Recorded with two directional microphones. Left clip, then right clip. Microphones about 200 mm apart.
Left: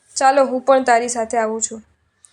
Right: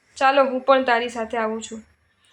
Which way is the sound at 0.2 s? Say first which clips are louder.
Left 3 dB; 40° left (ahead or behind).